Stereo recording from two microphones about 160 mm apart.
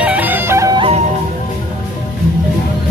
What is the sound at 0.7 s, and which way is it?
Music, 35° right (ahead or behind).